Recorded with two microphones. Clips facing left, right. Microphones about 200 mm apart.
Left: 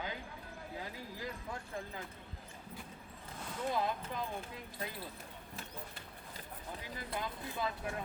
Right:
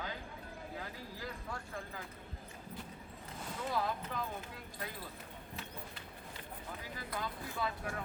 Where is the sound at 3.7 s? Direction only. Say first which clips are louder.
Right 1 dB; 20° left (ahead or behind).